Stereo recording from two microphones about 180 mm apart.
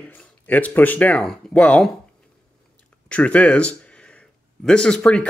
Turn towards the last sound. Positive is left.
turn(degrees=5)  # may be behind; listen again after turning